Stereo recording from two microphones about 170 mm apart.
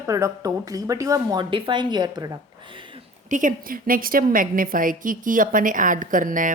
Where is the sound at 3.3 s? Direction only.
50° right (ahead or behind).